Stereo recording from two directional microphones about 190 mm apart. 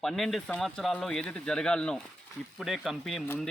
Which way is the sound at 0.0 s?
Centre (ahead or behind).